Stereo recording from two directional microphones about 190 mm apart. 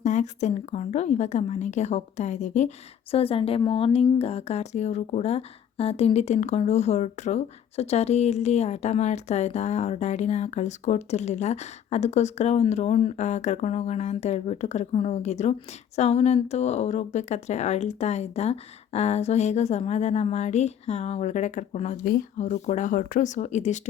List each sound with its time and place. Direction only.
0.0 s a woman's voice: 40° left (ahead or behind)